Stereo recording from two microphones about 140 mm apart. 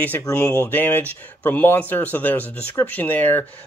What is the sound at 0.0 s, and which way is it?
Speech, 10° left (ahead or behind).